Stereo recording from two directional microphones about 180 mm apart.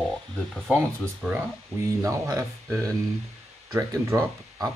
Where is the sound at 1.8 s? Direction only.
20° right (ahead or behind).